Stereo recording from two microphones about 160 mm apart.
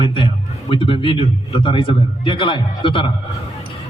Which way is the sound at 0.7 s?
35° left (ahead or behind).